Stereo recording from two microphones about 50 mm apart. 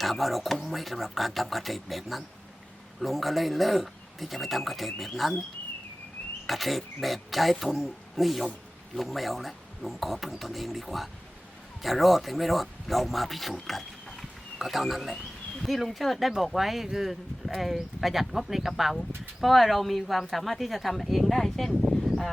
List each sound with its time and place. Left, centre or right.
0.0 s speech: centre
6.5 s speech: centre